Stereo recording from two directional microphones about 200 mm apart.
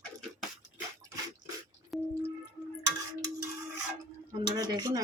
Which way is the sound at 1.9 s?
Centre (ahead or behind).